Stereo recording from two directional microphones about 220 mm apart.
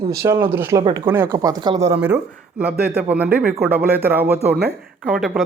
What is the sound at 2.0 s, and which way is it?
A man's voice, 5° right (ahead or behind).